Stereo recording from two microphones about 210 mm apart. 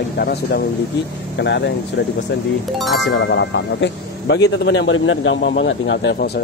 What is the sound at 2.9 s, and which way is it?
Speech, 55° left (ahead or behind).